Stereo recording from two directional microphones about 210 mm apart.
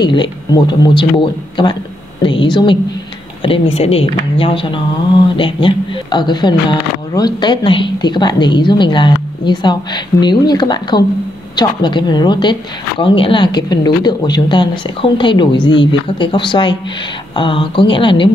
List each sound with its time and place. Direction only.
0.0 s a woman's voice: 20° left (ahead or behind)